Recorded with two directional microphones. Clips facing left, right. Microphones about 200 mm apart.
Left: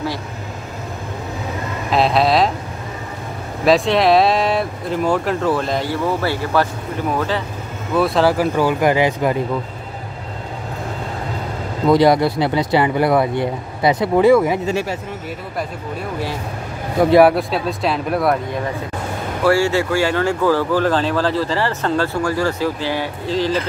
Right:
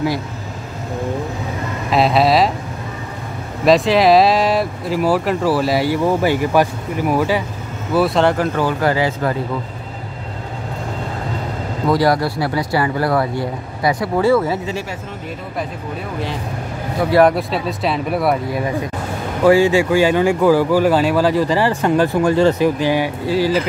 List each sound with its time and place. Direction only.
1.9 s speech: centre (ahead or behind)
3.6 s speech: centre (ahead or behind)
7.9 s speech: centre (ahead or behind); by 9.4 s 15° left (ahead or behind)
11.9 s speech: 20° left (ahead or behind)
17.3 s speech: centre (ahead or behind)
19.4 s speech: 15° right (ahead or behind)